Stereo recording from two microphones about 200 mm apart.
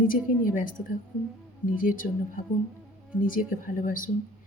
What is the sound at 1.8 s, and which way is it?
Speech, 45° left (ahead or behind).